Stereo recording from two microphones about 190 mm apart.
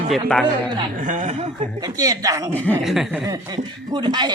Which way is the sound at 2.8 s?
Centre (ahead or behind).